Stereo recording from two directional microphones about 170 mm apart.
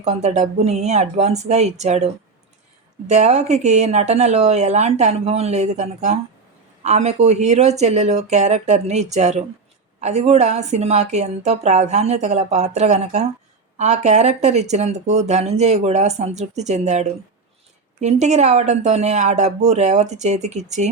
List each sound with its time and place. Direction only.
0.0 s speech: 40° right (ahead or behind)
3.1 s speech: 40° right (ahead or behind)